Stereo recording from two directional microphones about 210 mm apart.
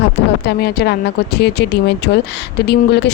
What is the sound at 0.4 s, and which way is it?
Speech, 50° left (ahead or behind).